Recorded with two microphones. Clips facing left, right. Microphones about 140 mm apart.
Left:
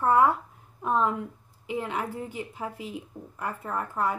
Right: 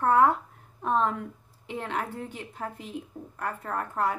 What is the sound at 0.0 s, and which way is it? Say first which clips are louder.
A woman's voice: even; 10° left (ahead or behind).